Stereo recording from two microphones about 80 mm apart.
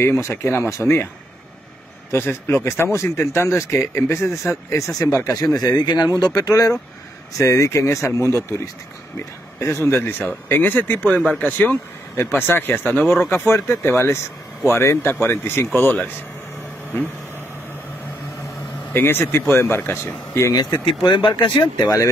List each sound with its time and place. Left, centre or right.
0.0 s speech: left
2.1 s speech: left
9.6 s speech: left
18.9 s speech: left
20.5 s speech: left